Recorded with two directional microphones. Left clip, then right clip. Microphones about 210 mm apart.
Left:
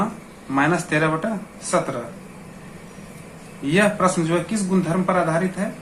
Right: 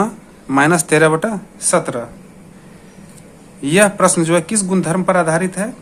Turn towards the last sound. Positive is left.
turn(degrees=-50)  # may be behind; listen again after turning